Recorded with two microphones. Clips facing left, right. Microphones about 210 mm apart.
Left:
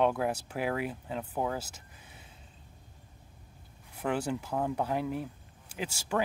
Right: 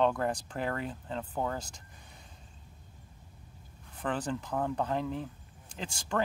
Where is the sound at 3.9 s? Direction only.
10° left (ahead or behind).